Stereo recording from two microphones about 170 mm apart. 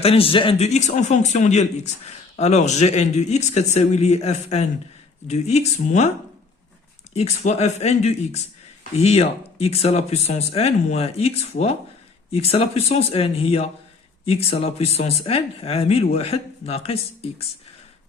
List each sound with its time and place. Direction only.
0.0 s speech: 35° left (ahead or behind)
7.1 s speech: 40° left (ahead or behind)
12.3 s speech: 35° left (ahead or behind)